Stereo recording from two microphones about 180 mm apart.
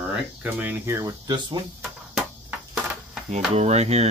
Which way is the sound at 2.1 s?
5° right (ahead or behind).